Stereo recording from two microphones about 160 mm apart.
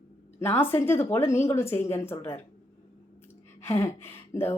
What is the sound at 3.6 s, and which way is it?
Speech, 15° left (ahead or behind).